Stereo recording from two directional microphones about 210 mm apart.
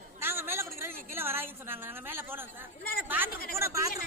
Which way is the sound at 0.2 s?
10° right (ahead or behind).